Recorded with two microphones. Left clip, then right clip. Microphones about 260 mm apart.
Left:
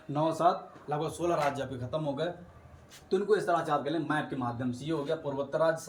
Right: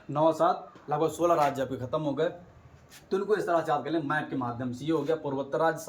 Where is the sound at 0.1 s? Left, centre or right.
Centre.